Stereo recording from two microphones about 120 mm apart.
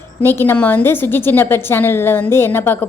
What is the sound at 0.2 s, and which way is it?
A woman's voice, 20° left (ahead or behind).